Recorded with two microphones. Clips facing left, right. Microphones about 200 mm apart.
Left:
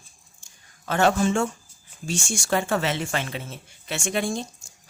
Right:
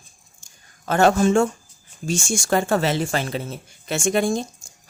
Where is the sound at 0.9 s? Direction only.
45° right (ahead or behind).